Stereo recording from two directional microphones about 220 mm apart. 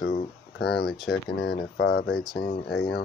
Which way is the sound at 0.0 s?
45° left (ahead or behind).